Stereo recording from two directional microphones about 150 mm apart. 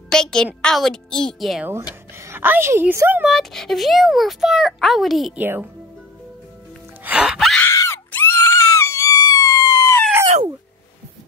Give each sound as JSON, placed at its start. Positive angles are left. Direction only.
{"t": 0.1, "sound": "a sound", "side_deg": 5}
{"t": 0.6, "sound": "speech", "side_deg": 5}
{"t": 2.1, "sound": "a woman's voice", "side_deg": -15}
{"t": 3.3, "sound": "speech", "side_deg": 0}
{"t": 5.4, "sound": "speech", "side_deg": -15}
{"t": 7.1, "sound": "wail", "side_deg": -5}
{"t": 7.6, "sound": "screaming", "side_deg": 20}